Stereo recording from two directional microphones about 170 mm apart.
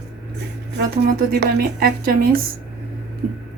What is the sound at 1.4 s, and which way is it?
Speech, 65° right (ahead or behind).